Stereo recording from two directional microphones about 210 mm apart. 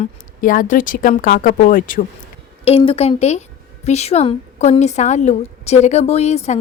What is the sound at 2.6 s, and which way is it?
A woman's voice, 25° left (ahead or behind).